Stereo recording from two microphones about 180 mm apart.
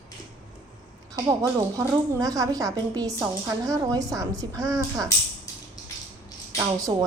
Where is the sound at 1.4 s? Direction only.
15° right (ahead or behind).